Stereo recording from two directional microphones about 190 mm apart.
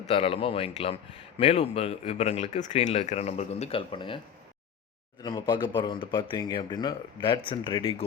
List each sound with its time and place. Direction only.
0.1 s speech: 30° left (ahead or behind)
5.2 s speech: 20° left (ahead or behind)